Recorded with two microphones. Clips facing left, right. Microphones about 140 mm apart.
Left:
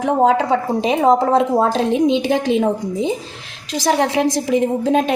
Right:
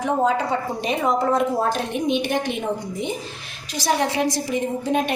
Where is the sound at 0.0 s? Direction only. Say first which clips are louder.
Left 6 dB; 90° left.